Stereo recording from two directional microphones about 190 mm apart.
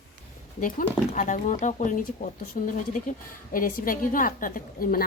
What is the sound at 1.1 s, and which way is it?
A woman's voice, 40° left (ahead or behind).